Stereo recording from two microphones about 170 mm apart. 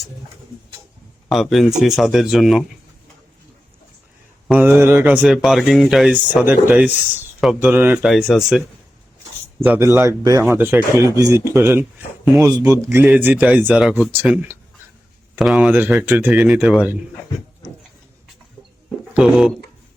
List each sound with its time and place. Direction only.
1.3 s speech: centre (ahead or behind)
4.4 s speech: 10° right (ahead or behind)
6.3 s speech: 10° right (ahead or behind)
9.6 s speech: 15° right (ahead or behind)
12.9 s speech: 10° right (ahead or behind)
19.1 s speech: 5° right (ahead or behind)